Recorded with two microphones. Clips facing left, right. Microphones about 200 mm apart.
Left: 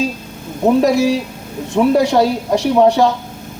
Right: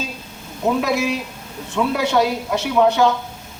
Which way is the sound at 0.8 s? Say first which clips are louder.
Left 7 dB; 35° left (ahead or behind).